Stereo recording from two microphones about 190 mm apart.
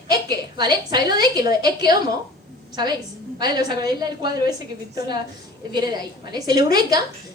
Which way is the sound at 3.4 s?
20° right (ahead or behind).